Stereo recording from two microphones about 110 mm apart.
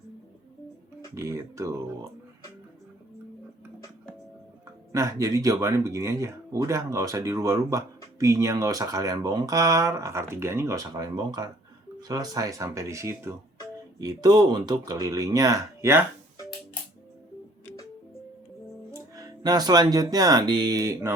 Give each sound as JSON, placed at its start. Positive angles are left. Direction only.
{"t": 1.1, "sound": "speech", "side_deg": -25}
{"t": 4.9, "sound": "speech", "side_deg": -30}
{"t": 10.8, "sound": "speech", "side_deg": -40}
{"t": 14.0, "sound": "speech", "side_deg": -35}
{"t": 18.9, "sound": "speech", "side_deg": -30}